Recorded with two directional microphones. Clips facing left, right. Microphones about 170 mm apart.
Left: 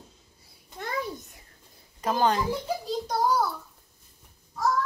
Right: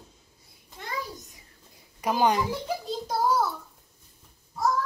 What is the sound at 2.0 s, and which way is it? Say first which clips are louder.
Speech: right 1 dB; 10° right (ahead or behind).